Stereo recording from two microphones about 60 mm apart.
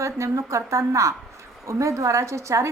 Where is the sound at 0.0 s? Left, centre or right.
Right.